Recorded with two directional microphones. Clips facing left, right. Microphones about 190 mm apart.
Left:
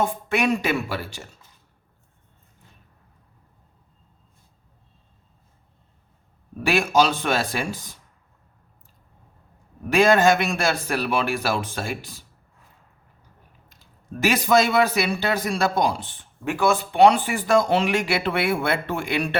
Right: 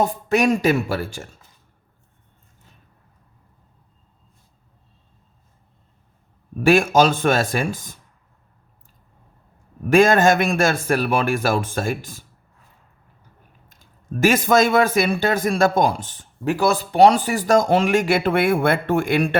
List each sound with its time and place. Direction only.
0.0 s a woman's voice: 40° right (ahead or behind)
6.6 s speech: 50° right (ahead or behind)
9.9 s speech: 50° right (ahead or behind)
13.7 s speech: 50° right (ahead or behind)